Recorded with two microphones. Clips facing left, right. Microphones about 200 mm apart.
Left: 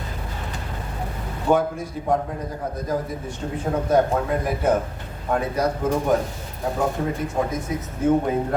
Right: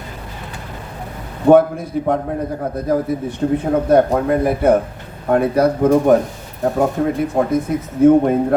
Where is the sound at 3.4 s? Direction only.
55° right (ahead or behind).